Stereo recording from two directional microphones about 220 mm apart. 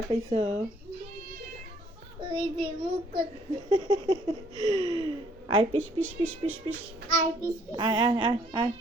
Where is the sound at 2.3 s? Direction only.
25° right (ahead or behind).